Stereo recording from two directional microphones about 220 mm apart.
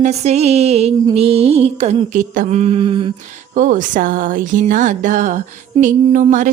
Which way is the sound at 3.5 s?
35° right (ahead or behind).